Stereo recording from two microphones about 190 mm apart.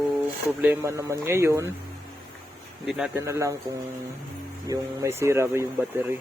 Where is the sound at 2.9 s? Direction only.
5° right (ahead or behind).